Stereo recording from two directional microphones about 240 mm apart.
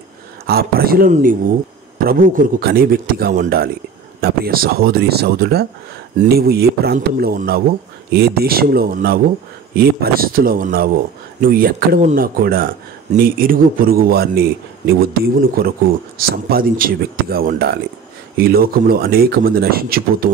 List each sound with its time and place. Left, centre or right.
0.5 s speech: right